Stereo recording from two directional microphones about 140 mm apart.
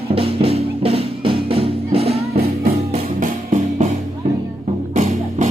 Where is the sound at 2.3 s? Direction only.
90° right.